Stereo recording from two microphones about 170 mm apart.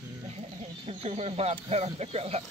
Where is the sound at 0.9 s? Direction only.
40° right (ahead or behind).